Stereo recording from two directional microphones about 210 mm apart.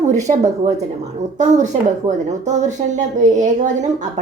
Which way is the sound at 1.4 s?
35° right (ahead or behind).